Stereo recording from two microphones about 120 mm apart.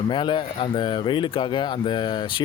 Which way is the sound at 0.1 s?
40° left (ahead or behind).